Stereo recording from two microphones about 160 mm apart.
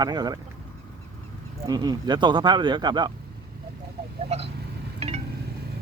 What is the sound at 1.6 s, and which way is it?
Speech, 25° right (ahead or behind).